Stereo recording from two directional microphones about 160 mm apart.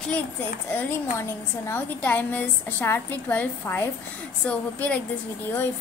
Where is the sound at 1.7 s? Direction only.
10° left (ahead or behind).